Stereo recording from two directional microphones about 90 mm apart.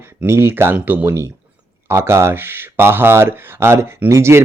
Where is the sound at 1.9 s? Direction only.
30° right (ahead or behind).